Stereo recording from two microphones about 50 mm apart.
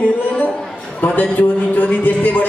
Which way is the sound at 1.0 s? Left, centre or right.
Left.